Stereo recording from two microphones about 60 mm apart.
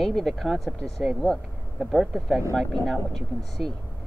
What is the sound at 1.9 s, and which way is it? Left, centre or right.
Speech, centre.